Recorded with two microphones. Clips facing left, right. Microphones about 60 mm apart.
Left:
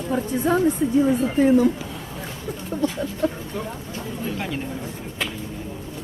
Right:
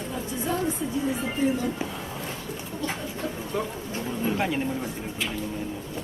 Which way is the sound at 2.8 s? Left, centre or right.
Left.